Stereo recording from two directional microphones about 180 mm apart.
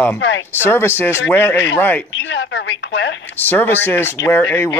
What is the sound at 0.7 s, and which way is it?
Speech, 10° left (ahead or behind).